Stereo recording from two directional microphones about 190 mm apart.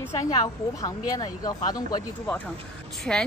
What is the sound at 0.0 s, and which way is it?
A woman's voice, 15° left (ahead or behind).